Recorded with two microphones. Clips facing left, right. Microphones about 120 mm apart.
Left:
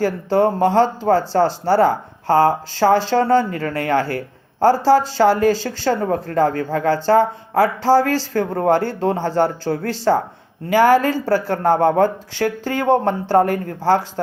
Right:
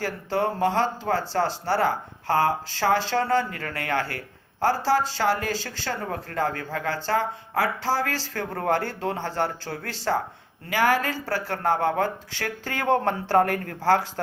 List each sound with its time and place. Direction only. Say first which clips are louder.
0.0 s speech: left 9 dB; 35° left (ahead or behind)